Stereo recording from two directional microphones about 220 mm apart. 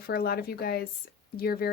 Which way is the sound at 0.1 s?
45° left (ahead or behind).